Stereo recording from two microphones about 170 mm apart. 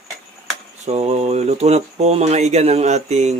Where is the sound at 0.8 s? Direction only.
40° right (ahead or behind).